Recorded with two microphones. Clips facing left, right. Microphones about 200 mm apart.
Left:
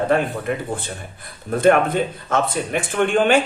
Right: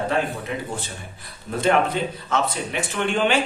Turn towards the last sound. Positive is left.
turn(degrees=50)  # may be behind; listen again after turning